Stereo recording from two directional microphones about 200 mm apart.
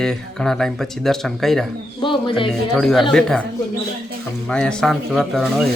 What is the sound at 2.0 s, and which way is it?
Speech, 25° left (ahead or behind).